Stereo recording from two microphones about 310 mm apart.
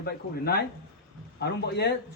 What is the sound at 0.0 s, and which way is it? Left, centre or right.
A man's voice, left.